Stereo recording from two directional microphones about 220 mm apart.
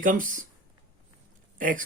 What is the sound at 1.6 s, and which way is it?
Speech, 40° right (ahead or behind).